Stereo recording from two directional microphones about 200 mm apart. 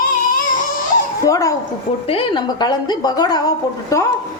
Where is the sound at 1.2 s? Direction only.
15° left (ahead or behind).